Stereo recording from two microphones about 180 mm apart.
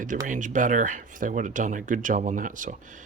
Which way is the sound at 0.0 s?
45° right (ahead or behind).